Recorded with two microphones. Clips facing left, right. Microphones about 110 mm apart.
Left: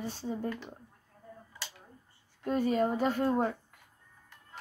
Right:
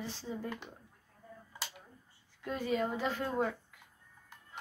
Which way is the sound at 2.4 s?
45° left (ahead or behind).